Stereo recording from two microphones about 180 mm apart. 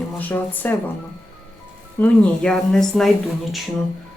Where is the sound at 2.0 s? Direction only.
5° left (ahead or behind).